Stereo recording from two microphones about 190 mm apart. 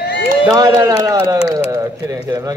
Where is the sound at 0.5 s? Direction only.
20° right (ahead or behind).